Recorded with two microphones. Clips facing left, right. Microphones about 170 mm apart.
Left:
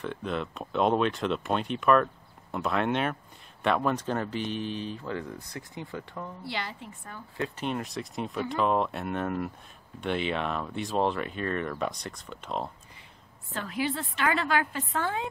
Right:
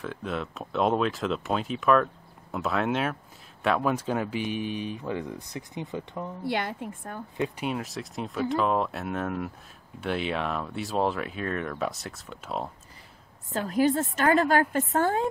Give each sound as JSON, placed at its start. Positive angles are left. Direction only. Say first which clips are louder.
{"t": 0.0, "sound": "speech", "louder": "even", "side_deg": 0}
{"t": 6.4, "sound": "a woman's voice", "louder": "right 10 dB", "side_deg": -50}
{"t": 7.3, "sound": "speech", "louder": "right 3 dB", "side_deg": -15}
{"t": 7.6, "sound": "speech", "louder": "right 1 dB", "side_deg": -5}
{"t": 13.5, "sound": "a woman's voice", "louder": "right 7 dB", "side_deg": -40}